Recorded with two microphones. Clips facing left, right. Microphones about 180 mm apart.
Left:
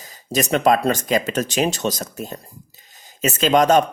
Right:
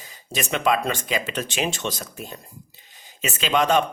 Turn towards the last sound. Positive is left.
turn(degrees=40)  # may be behind; listen again after turning